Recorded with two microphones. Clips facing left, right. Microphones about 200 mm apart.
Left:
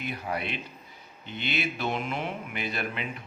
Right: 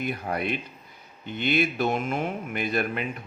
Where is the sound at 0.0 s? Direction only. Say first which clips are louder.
Right 4 dB; 50° right (ahead or behind).